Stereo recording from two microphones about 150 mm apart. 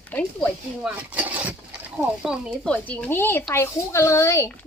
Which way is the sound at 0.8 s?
10° right (ahead or behind).